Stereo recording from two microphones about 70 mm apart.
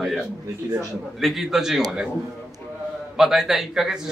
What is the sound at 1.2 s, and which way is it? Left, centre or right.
Speech, centre.